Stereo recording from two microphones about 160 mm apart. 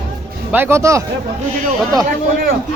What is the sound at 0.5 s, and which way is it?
Speech, 15° right (ahead or behind).